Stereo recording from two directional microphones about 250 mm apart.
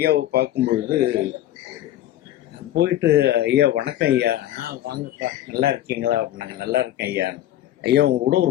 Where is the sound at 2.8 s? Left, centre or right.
Right.